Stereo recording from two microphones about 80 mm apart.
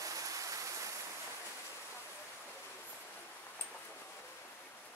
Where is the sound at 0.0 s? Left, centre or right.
Right.